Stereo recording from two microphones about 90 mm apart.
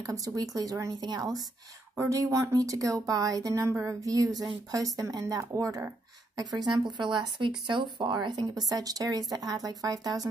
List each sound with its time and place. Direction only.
0.0 s speech: 40° right (ahead or behind)
2.0 s speech: 35° right (ahead or behind)
7.0 s speech: 60° right (ahead or behind)
8.6 s speech: 45° right (ahead or behind)